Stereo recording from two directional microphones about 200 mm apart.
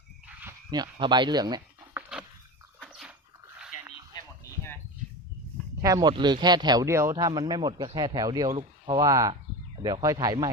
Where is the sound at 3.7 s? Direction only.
40° left (ahead or behind).